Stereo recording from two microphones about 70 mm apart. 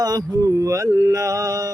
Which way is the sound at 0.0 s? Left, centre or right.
Right.